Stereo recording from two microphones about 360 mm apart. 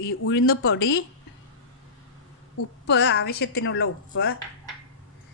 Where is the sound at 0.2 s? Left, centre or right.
Left.